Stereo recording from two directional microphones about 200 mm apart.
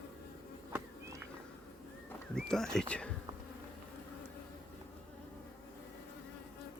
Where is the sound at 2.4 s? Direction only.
5° left (ahead or behind).